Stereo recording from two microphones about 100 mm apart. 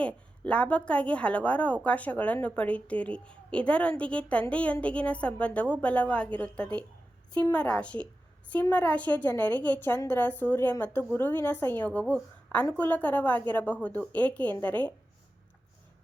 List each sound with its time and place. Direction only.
0.0 s a woman's voice: 15° left (ahead or behind)